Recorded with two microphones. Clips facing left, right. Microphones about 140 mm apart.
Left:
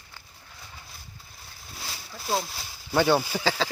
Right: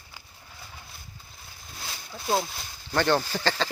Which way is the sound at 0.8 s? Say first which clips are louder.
Even; centre (ahead or behind).